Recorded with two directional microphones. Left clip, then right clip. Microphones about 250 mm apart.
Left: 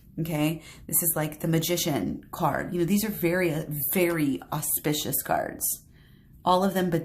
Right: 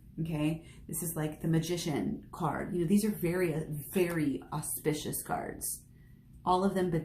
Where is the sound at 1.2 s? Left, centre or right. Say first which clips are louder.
Left 6 dB; left.